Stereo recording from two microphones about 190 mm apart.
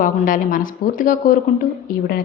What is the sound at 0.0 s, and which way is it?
A woman's voice, 45° left (ahead or behind).